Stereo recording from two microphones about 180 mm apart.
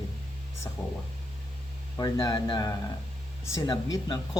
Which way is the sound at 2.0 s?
25° left (ahead or behind).